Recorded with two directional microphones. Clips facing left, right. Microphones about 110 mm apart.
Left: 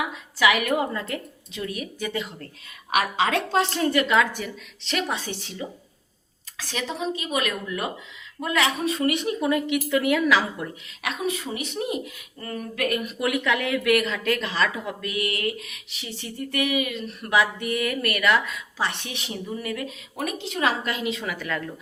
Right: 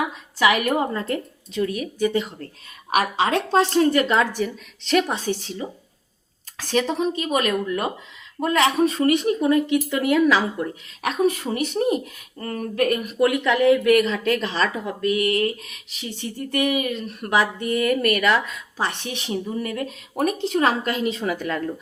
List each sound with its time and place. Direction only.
0.3 s speech: 35° right (ahead or behind)